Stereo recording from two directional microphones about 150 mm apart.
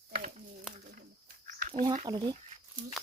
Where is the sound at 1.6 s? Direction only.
65° right (ahead or behind).